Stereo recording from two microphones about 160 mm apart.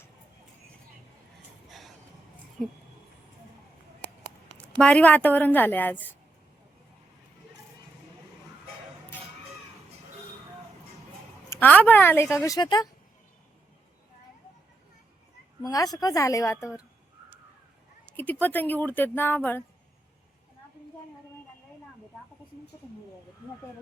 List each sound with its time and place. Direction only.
4.5 s speech: 5° left (ahead or behind)
11.4 s a woman's voice: 15° left (ahead or behind)
15.6 s a woman's voice: 25° left (ahead or behind)
18.2 s speech: 10° left (ahead or behind)